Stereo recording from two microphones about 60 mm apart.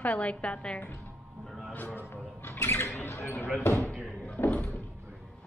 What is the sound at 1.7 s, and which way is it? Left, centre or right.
Speech, left.